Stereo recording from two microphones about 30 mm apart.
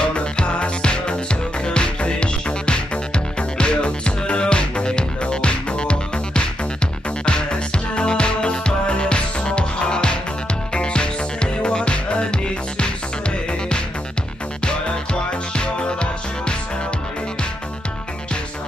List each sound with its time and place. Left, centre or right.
0.0 s music: left
15.5 s music: left